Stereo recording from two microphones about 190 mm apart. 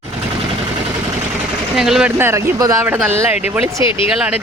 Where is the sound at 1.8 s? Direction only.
Centre (ahead or behind).